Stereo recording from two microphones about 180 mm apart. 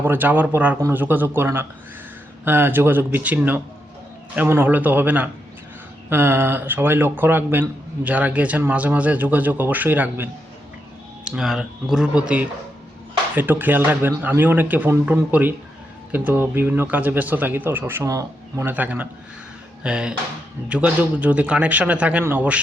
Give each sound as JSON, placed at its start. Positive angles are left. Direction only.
{"t": 0.0, "sound": "speech", "side_deg": -10}
{"t": 11.3, "sound": "speech", "side_deg": -5}